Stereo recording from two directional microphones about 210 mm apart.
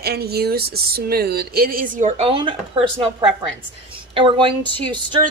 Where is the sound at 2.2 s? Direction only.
25° right (ahead or behind).